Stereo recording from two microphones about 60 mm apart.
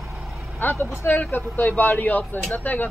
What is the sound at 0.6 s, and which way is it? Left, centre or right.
Speech, left.